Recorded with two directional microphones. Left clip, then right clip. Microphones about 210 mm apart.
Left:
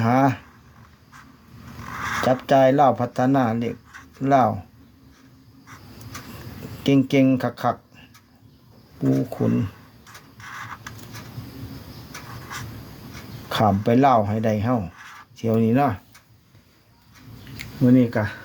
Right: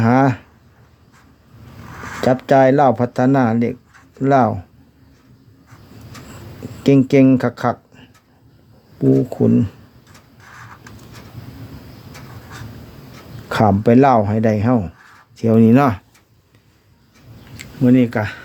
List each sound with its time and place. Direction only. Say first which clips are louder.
0.0 s a sound: right 4 dB; 45° right (ahead or behind)
2.2 s speech: right 5 dB; 45° right (ahead or behind)
6.8 s speech: right 6 dB; 45° right (ahead or behind)
9.3 s speech: right 8 dB; 45° right (ahead or behind)
10.4 s vehicle: left 4 dB; 5° left (ahead or behind)
13.5 s speech: right 6 dB; 45° right (ahead or behind)
17.6 s speech: right 4 dB; 25° right (ahead or behind)